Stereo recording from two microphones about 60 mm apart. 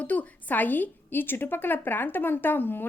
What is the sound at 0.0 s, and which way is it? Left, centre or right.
A woman's voice, left.